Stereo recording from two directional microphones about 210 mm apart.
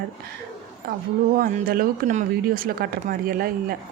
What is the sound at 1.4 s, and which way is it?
Speech, 40° right (ahead or behind).